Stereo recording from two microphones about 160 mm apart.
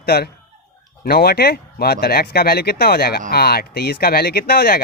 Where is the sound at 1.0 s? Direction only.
75° left (ahead or behind).